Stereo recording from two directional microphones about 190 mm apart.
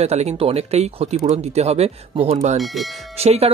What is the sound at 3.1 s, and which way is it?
Speech, 35° right (ahead or behind).